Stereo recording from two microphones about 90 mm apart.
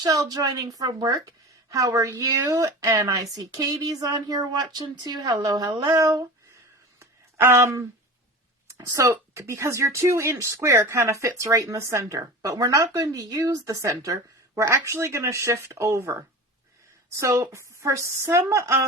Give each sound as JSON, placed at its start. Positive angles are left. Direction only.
{"t": 0.0, "sound": "speech", "side_deg": -40}
{"t": 7.0, "sound": "a sound", "side_deg": -30}
{"t": 8.8, "sound": "speech", "side_deg": -35}